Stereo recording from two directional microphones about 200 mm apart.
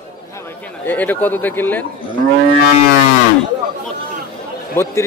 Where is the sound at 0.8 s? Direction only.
10° left (ahead or behind).